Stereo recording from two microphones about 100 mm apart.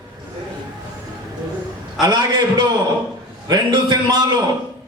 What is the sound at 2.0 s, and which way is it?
A man's voice, 45° right (ahead or behind).